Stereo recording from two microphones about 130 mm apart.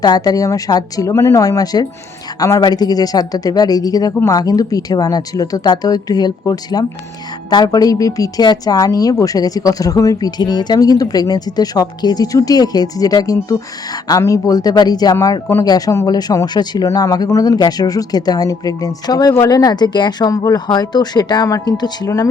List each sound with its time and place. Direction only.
0.0 s speech: 30° left (ahead or behind)